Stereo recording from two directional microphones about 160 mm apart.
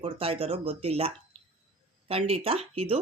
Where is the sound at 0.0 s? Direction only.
35° right (ahead or behind).